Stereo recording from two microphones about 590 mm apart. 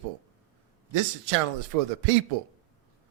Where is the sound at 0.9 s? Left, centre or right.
Right.